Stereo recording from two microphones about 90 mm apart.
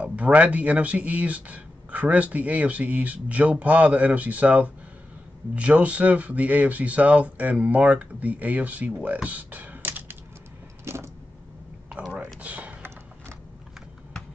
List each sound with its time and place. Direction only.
0.0 s speech: 15° right (ahead or behind)
10.9 s vehicle: 30° right (ahead or behind)
11.9 s speech: 15° right (ahead or behind)
12.4 s typing: 15° right (ahead or behind)